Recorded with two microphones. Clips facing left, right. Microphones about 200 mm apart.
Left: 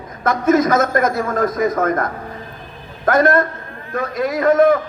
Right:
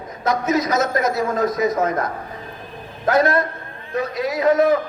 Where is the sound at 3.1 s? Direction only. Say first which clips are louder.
Left 3 dB; 50° left (ahead or behind).